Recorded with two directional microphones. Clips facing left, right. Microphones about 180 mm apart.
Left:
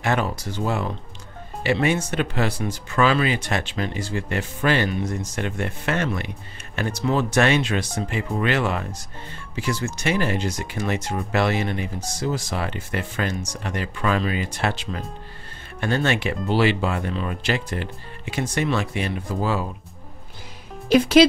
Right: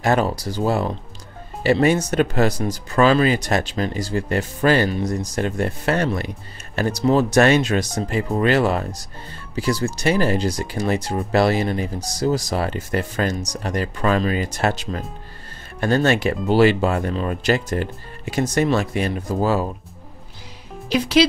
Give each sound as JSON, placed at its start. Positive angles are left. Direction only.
{"t": 0.0, "sound": "speech", "side_deg": -35}
{"t": 20.9, "sound": "speech", "side_deg": 50}